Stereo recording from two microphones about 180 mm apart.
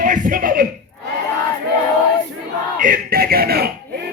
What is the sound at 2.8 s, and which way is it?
Speech, 50° right (ahead or behind).